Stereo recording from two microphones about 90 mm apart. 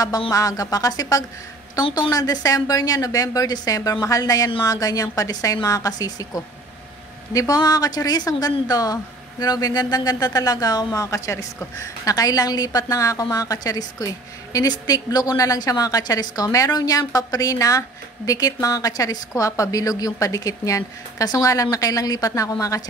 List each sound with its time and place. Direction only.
0.3 s a woman's voice: 40° left (ahead or behind)